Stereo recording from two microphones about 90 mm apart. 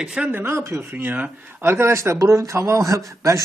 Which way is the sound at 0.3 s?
25° right (ahead or behind).